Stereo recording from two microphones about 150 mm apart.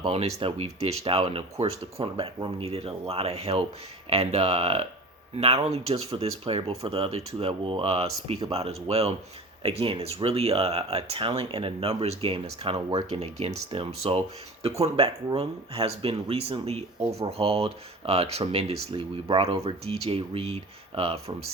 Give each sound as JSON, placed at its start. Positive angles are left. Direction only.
{"t": 0.0, "sound": "speech", "side_deg": -45}